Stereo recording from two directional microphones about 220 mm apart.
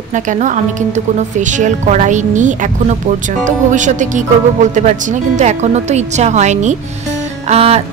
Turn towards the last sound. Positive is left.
turn(degrees=-30)  # may be behind; listen again after turning